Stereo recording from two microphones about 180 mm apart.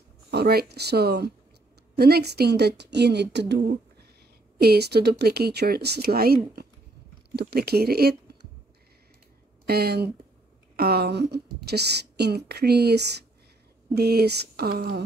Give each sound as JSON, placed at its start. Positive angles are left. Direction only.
{"t": 0.3, "sound": "a woman's voice", "side_deg": -60}
{"t": 9.7, "sound": "a woman's voice", "side_deg": -60}